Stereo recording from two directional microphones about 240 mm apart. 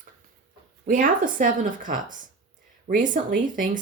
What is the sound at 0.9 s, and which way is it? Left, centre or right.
Speech, right.